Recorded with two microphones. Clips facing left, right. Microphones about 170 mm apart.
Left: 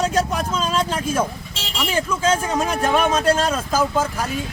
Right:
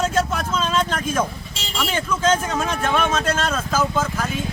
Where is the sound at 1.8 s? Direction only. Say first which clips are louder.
Left 1 dB; 10° left (ahead or behind).